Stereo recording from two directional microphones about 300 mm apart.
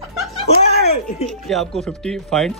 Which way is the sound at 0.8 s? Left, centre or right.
Left.